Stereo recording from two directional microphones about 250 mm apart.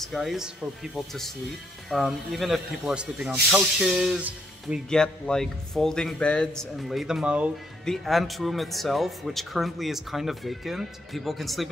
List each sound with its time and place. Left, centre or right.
0.0 s speech: centre